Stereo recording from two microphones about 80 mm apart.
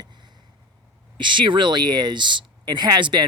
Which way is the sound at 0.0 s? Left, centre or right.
Right.